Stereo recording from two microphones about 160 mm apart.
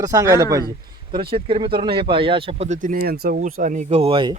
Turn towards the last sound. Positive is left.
turn(degrees=-30)  # may be behind; listen again after turning